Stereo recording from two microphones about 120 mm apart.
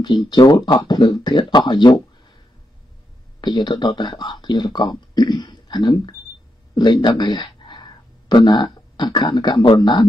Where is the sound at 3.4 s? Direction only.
35° left (ahead or behind).